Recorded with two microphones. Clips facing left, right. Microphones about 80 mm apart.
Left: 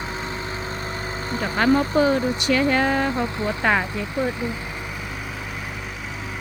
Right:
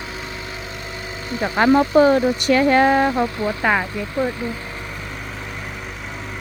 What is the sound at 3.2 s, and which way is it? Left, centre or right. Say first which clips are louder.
Speech: right 2 dB; left.